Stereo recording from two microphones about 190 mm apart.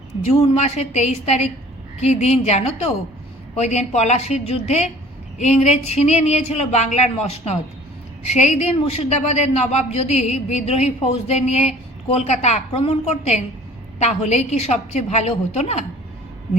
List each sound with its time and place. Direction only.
0.3 s a man's voice: 35° left (ahead or behind)